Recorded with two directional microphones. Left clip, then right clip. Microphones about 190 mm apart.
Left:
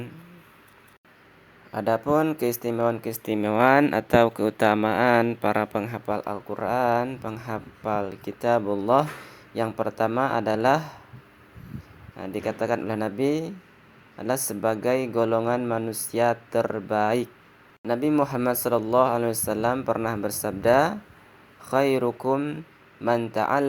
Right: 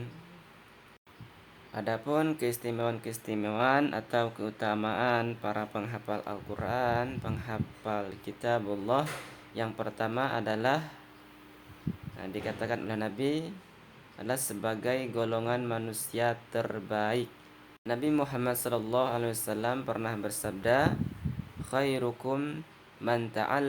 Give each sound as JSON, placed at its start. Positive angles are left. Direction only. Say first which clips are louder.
{"t": 1.7, "sound": "speech", "louder": "left 8 dB", "side_deg": 30}
{"t": 12.1, "sound": "speech", "louder": "left 8 dB", "side_deg": 30}